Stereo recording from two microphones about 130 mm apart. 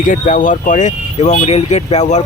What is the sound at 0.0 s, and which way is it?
Speech, 90° left.